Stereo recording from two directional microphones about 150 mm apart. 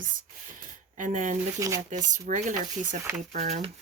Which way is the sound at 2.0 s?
55° right (ahead or behind).